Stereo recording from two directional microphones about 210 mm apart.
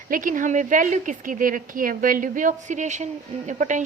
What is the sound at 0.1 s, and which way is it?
A woman's voice, 40° right (ahead or behind).